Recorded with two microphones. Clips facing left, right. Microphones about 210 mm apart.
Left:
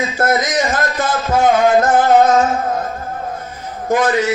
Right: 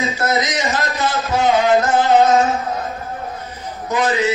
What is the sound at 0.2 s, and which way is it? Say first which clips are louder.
Music: left 5 dB; 50° left (ahead or behind).